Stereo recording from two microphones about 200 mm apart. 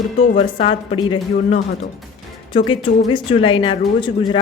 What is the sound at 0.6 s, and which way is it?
A woman's voice, 30° left (ahead or behind).